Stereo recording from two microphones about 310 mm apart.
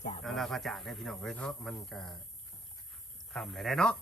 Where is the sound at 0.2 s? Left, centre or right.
Centre.